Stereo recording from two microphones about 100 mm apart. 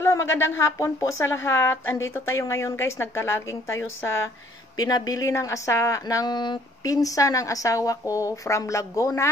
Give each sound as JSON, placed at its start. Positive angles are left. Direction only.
{"t": 0.0, "sound": "a woman's voice", "side_deg": 30}
{"t": 4.7, "sound": "speech", "side_deg": 40}